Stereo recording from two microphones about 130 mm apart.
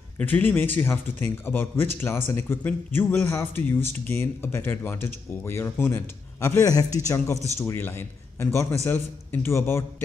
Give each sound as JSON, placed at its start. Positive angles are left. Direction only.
{"t": 0.2, "sound": "a man's voice", "side_deg": 15}